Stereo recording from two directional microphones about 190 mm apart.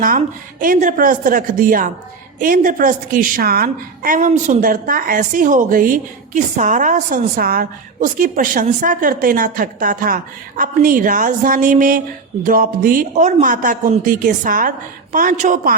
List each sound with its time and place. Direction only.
0.6 s a woman's voice: 45° right (ahead or behind)